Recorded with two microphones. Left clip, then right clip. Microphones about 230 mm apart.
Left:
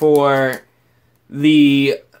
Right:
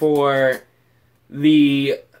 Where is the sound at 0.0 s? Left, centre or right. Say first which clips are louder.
Left 3 dB; left.